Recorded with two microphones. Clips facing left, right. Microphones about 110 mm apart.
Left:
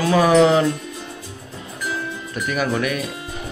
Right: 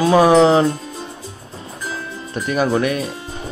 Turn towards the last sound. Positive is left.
turn(degrees=-30)  # may be behind; listen again after turning